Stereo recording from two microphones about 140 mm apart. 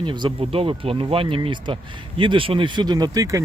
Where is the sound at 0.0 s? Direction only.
35° right (ahead or behind).